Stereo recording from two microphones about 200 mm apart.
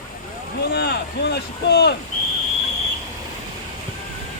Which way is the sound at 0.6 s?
55° left (ahead or behind).